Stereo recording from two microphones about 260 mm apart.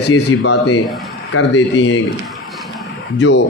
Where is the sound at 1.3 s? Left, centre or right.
Left.